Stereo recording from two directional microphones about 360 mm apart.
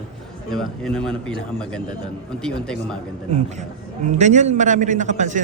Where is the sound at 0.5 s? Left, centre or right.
Centre.